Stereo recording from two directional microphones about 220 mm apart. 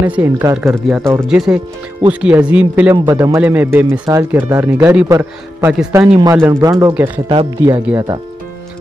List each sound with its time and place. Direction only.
0.0 s speech: 10° right (ahead or behind)